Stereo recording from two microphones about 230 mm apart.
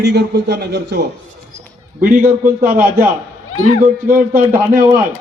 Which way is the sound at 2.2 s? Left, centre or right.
Right.